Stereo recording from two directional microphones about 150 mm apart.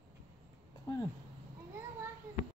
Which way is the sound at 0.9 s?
25° left (ahead or behind).